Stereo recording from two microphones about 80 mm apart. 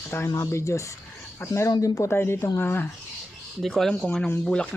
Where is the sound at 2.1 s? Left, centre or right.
Left.